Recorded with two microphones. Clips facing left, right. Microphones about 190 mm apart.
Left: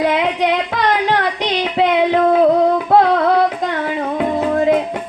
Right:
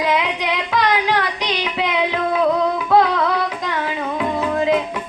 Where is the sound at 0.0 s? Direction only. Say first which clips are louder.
Left 4 dB; 55° left (ahead or behind).